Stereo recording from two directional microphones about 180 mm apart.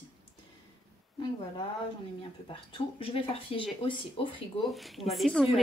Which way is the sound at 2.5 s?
30° left (ahead or behind).